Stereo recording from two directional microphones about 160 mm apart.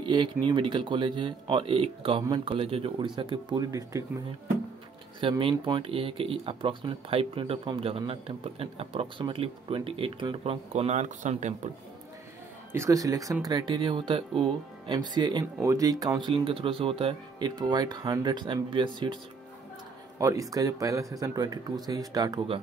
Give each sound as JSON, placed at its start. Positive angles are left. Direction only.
{"t": 0.0, "sound": "speech", "side_deg": -30}
{"t": 5.2, "sound": "speech", "side_deg": -35}
{"t": 12.7, "sound": "speech", "side_deg": -20}
{"t": 20.2, "sound": "speech", "side_deg": -20}